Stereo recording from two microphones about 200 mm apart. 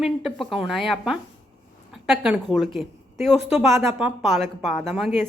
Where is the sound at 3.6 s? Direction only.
10° right (ahead or behind).